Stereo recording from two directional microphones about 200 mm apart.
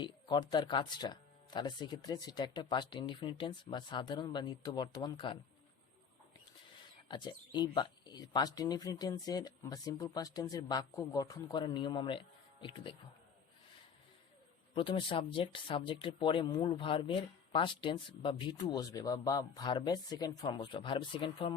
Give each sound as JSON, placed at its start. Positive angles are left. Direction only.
{"t": 0.0, "sound": "speech", "side_deg": 20}
{"t": 7.1, "sound": "speech", "side_deg": 20}
{"t": 14.8, "sound": "speech", "side_deg": 25}